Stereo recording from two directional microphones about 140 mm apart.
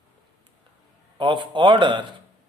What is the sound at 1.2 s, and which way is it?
Speech, 35° right (ahead or behind).